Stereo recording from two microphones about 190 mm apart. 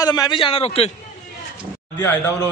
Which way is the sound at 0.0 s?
20° left (ahead or behind).